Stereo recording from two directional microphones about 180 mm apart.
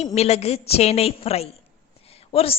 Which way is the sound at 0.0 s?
35° left (ahead or behind).